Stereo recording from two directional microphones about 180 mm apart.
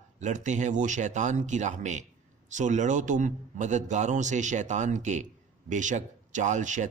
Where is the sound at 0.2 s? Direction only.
40° right (ahead or behind).